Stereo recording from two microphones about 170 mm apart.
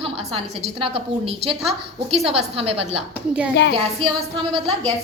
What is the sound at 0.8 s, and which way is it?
A woman's voice, 35° right (ahead or behind).